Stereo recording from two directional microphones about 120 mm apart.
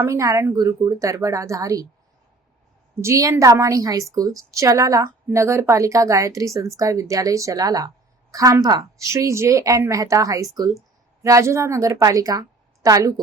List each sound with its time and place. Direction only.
0.0 s a woman's voice: 25° right (ahead or behind)
3.0 s a woman's voice: 25° right (ahead or behind)